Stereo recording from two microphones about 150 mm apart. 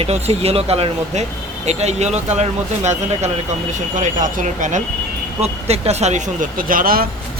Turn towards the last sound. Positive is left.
turn(degrees=-75)  # may be behind; listen again after turning